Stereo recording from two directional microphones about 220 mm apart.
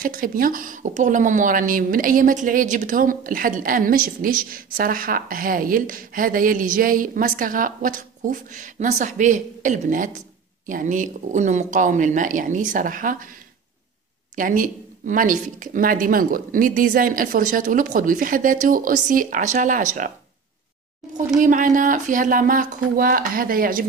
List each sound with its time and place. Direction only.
0.0 s a woman's voice: 40° right (ahead or behind)
14.3 s a woman's voice: 40° right (ahead or behind)
21.4 s a woman's voice: 35° right (ahead or behind)